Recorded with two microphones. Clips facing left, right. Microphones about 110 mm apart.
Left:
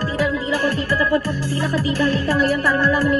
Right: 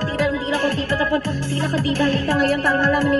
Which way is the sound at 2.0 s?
50° right (ahead or behind).